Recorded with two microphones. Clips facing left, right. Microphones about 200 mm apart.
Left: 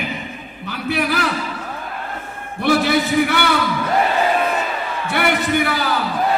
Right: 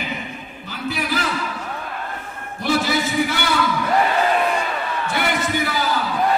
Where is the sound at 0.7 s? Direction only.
65° left (ahead or behind).